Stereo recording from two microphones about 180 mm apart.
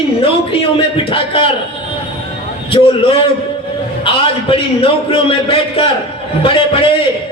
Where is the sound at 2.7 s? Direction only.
30° left (ahead or behind).